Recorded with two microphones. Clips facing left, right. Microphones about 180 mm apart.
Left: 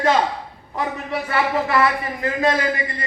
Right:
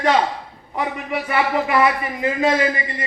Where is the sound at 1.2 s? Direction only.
15° right (ahead or behind).